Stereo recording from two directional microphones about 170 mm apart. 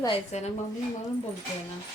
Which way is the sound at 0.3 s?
40° left (ahead or behind).